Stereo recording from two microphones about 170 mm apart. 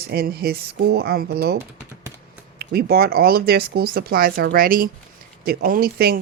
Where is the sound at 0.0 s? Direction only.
65° right (ahead or behind).